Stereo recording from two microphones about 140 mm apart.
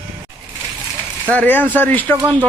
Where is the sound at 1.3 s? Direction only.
10° left (ahead or behind).